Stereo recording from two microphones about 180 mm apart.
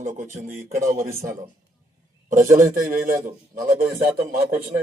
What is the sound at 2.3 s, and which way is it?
Speech, 45° right (ahead or behind).